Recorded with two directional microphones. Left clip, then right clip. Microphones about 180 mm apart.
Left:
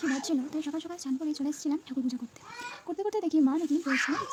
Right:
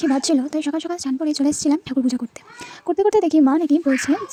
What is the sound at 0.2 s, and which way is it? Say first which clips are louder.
A woman's voice: right 12 dB; 40° right (ahead or behind).